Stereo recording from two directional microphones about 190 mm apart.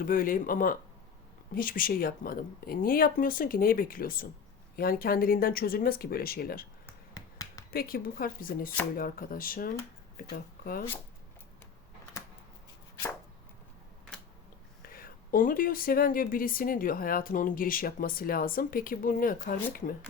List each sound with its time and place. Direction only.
0.0 s speech: 50° left (ahead or behind)
6.8 s finger snapping: 15° left (ahead or behind)
7.7 s speech: 50° left (ahead or behind)
14.8 s speech: 50° left (ahead or behind)